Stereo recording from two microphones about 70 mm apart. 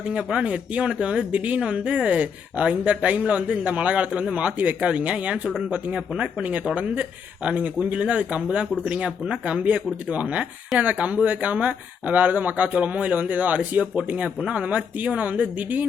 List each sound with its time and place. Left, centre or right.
0.1 s speech: centre